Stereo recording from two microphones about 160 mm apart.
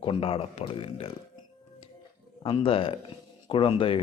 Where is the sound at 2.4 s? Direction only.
35° left (ahead or behind).